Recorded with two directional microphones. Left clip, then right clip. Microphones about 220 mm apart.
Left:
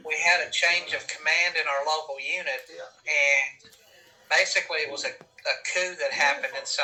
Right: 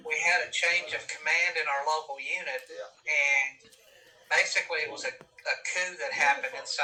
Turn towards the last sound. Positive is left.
turn(degrees=50)  # may be behind; listen again after turning